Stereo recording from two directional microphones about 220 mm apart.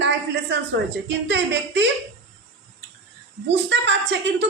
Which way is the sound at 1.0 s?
55° right (ahead or behind).